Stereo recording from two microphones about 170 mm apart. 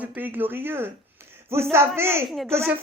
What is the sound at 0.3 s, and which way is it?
Speech, 10° right (ahead or behind).